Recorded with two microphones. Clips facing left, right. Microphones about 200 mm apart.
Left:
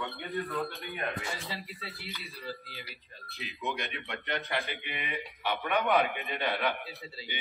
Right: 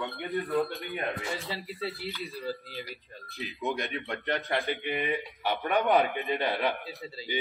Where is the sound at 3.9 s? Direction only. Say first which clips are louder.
Right 5 dB; 35° right (ahead or behind).